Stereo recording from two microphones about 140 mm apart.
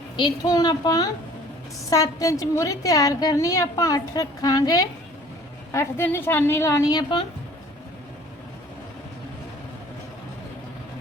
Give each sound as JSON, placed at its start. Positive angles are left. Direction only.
{"t": 0.2, "sound": "a woman's voice", "side_deg": 30}